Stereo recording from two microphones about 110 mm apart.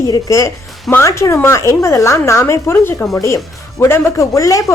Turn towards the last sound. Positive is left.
turn(degrees=30)  # may be behind; listen again after turning